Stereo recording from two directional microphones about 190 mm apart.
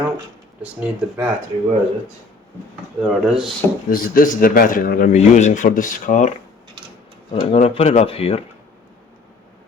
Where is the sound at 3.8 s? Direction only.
50° left (ahead or behind).